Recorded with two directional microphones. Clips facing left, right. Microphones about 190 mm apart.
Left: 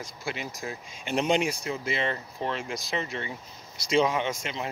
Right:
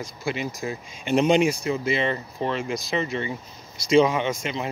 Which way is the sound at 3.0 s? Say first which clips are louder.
Right 6 dB; 90° right.